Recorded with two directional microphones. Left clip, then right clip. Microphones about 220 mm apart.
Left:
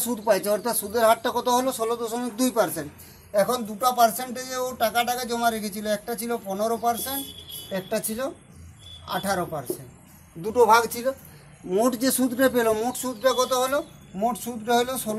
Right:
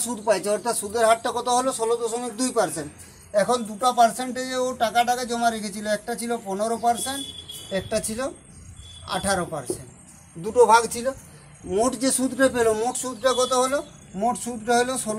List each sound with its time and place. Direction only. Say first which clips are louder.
0.0 s speech: even; 25° left (ahead or behind)
3.3 s speech: right 1 dB; 20° left (ahead or behind)
11.7 s speech: even; 30° left (ahead or behind)
12.5 s speech: right 1 dB; 15° left (ahead or behind)